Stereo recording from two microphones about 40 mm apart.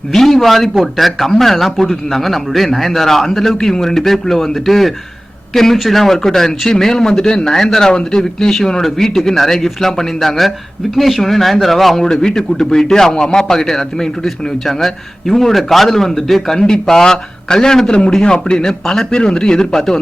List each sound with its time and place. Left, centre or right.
0.1 s a man's voice: centre
12.0 s a man's voice: centre